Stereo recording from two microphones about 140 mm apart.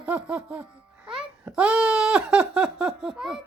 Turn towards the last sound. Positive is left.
turn(degrees=-5)  # may be behind; listen again after turning